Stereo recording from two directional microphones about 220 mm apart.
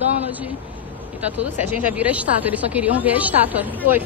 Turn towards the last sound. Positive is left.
turn(degrees=-10)  # may be behind; listen again after turning